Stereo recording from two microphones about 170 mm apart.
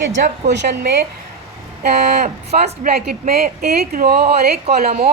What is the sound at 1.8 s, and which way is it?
A woman's voice, 65° right (ahead or behind).